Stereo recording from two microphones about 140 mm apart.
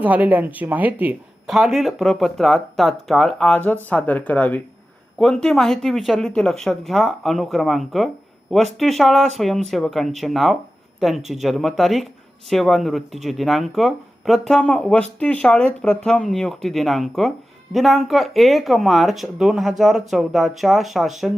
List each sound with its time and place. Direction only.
0.0 s speech: 10° right (ahead or behind)